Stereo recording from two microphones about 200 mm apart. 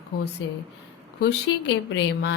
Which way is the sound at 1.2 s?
65° left (ahead or behind).